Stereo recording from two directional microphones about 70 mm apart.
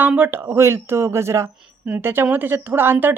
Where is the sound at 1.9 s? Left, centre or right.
Right.